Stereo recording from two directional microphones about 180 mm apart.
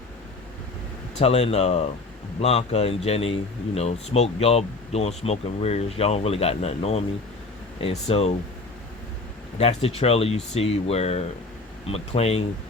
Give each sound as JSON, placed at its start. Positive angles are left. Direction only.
{"t": 1.2, "sound": "speech", "side_deg": 35}
{"t": 9.6, "sound": "speech", "side_deg": 35}